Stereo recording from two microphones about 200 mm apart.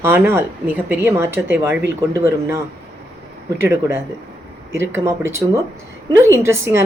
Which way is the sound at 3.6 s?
10° right (ahead or behind).